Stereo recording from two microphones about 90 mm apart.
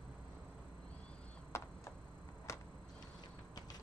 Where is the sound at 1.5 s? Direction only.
35° left (ahead or behind).